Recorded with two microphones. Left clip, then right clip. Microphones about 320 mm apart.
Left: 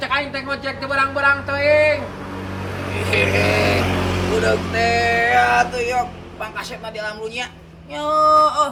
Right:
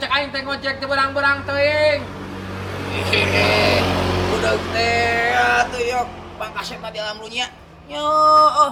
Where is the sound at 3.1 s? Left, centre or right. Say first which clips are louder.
Even; centre.